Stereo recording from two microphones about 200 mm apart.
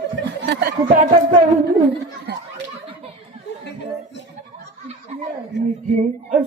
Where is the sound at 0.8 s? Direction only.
40° right (ahead or behind).